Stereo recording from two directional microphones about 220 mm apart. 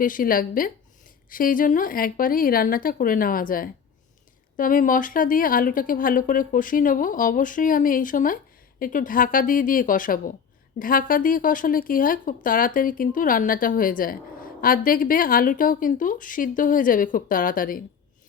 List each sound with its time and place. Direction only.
0.0 s speech: 40° left (ahead or behind)